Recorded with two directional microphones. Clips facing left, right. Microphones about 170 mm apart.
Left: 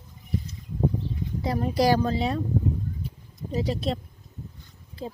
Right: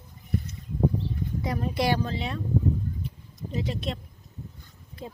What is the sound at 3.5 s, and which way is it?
Speech, 35° left (ahead or behind).